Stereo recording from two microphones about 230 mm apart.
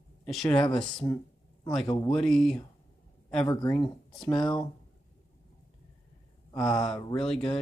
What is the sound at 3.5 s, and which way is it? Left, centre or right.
Speech, centre.